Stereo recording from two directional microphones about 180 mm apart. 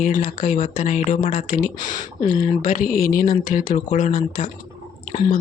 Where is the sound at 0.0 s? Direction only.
45° left (ahead or behind).